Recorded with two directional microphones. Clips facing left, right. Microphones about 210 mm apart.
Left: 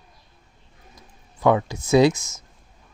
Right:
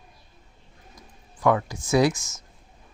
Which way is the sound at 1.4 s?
25° left (ahead or behind).